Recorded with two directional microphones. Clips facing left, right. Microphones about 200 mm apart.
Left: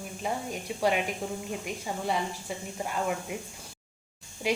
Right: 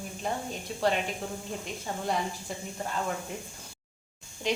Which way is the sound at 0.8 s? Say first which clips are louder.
Left 1 dB; 10° left (ahead or behind).